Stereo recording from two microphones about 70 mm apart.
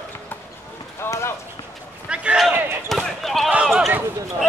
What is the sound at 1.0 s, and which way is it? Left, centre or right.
Clip-clop, left.